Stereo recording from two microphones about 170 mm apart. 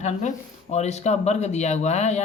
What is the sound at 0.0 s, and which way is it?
Speech, 45° left (ahead or behind).